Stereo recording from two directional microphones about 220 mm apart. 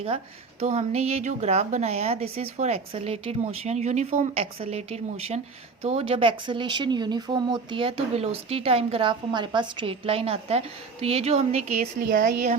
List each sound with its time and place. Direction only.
0.6 s speech: 30° right (ahead or behind)